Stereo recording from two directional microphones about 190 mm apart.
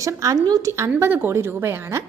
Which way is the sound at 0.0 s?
15° right (ahead or behind).